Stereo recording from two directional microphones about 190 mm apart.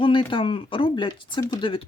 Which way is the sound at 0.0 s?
25° left (ahead or behind).